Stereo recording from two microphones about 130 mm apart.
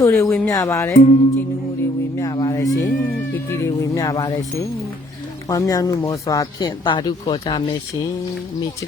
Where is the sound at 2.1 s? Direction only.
30° left (ahead or behind).